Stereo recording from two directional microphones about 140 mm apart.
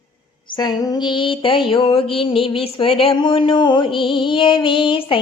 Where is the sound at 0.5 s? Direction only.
30° left (ahead or behind).